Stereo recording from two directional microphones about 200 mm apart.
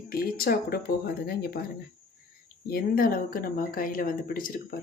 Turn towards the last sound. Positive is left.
turn(degrees=45)  # may be behind; listen again after turning